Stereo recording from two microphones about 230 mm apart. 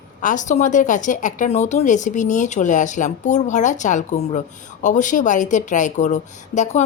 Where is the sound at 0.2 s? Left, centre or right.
Left.